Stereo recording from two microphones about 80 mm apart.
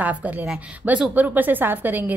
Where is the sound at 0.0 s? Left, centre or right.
Centre.